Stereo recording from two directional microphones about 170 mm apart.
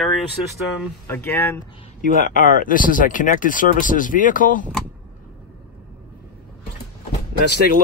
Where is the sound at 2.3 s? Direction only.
55° left (ahead or behind).